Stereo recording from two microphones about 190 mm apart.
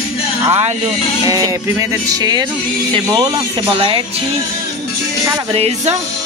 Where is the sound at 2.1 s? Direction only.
20° right (ahead or behind).